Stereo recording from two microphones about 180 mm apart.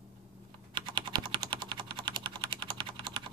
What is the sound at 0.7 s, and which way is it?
Typing, 25° right (ahead or behind).